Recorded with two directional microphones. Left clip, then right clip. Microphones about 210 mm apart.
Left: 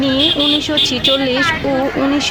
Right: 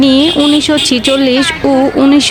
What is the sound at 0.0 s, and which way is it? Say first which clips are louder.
Speech: right 5 dB; 45° right (ahead or behind).